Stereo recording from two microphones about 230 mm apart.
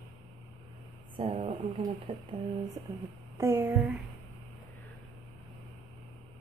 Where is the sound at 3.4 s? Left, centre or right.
Centre.